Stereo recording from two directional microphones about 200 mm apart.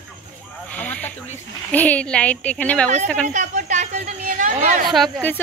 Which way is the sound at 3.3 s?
40° right (ahead or behind).